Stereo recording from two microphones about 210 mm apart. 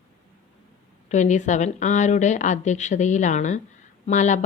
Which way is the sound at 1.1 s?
35° left (ahead or behind).